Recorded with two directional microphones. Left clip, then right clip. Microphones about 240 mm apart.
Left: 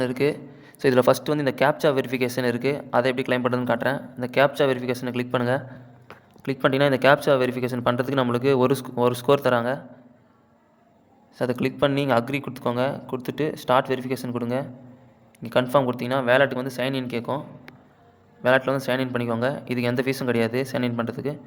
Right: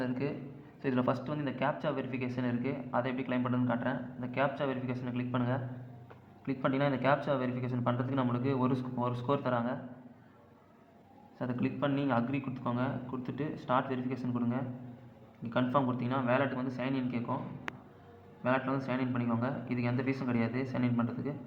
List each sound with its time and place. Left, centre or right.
0.0 s speech: left
11.3 s speech: left
18.4 s speech: left